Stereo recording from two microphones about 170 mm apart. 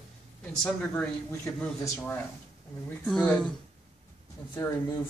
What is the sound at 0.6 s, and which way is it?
A man's voice, 10° left (ahead or behind).